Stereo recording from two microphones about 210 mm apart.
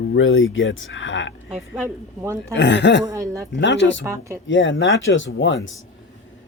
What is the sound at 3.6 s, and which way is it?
Speech, 60° left (ahead or behind).